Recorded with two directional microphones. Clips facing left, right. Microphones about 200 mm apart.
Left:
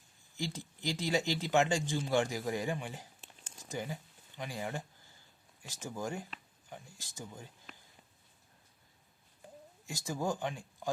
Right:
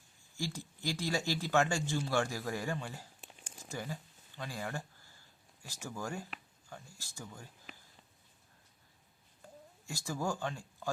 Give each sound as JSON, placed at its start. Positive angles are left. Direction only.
{"t": 0.3, "sound": "speech", "side_deg": 20}
{"t": 9.8, "sound": "speech", "side_deg": 20}